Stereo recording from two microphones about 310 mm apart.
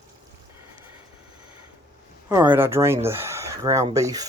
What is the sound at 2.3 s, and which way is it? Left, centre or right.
Speech, centre.